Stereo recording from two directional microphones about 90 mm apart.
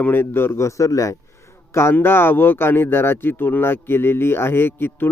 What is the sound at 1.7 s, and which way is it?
Speech, 25° left (ahead or behind).